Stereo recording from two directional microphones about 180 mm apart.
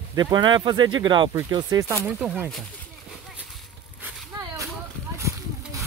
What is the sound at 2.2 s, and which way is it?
Speech, 5° right (ahead or behind).